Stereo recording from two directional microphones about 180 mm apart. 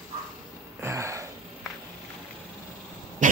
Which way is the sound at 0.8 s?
15° right (ahead or behind).